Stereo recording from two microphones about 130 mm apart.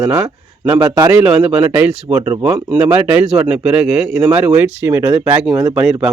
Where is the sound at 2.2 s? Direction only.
25° right (ahead or behind).